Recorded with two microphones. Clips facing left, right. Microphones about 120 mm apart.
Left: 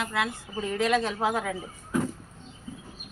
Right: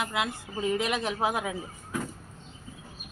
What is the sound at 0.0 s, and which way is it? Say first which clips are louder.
A woman's voice: left 1 dB; 15° right (ahead or behind).